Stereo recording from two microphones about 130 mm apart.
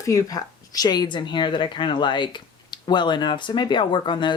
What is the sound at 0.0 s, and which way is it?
A woman's voice, 25° left (ahead or behind).